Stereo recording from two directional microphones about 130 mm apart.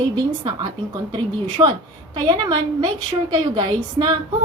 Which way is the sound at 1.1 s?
35° right (ahead or behind).